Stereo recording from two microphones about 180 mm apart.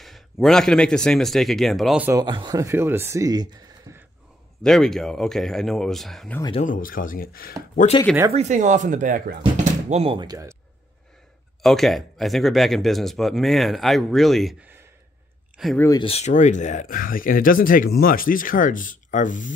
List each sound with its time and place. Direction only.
0.0 s speech: centre (ahead or behind)
2.1 s speech: 25° right (ahead or behind)
4.6 s speech: centre (ahead or behind)
6.6 s speech: 50° left (ahead or behind)
8.3 s speech: 40° right (ahead or behind)
9.8 s speech: 35° right (ahead or behind)
11.6 s speech: centre (ahead or behind)
15.5 s a sound: centre (ahead or behind)
16.0 s speech: 35° left (ahead or behind)